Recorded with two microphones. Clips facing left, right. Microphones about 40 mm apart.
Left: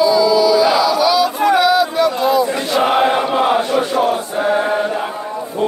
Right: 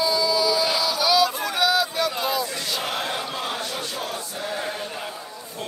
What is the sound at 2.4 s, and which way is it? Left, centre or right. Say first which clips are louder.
Chant: left 12 dB; left.